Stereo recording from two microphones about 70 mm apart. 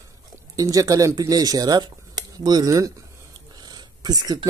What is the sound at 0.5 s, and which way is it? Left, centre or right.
Speech, right.